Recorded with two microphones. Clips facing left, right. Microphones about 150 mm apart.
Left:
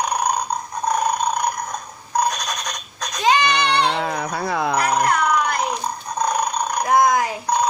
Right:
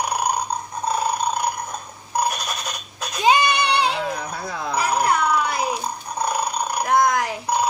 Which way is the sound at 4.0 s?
65° left (ahead or behind).